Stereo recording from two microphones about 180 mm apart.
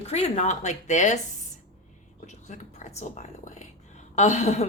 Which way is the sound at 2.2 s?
40° left (ahead or behind).